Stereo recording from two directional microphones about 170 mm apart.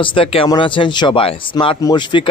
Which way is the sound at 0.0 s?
30° left (ahead or behind).